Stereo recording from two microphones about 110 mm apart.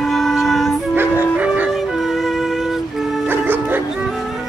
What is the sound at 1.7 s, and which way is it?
Music, centre (ahead or behind).